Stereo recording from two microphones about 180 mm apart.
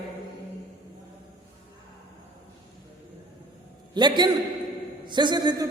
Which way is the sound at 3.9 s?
25° right (ahead or behind).